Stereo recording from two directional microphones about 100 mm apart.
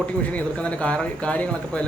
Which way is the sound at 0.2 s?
15° left (ahead or behind).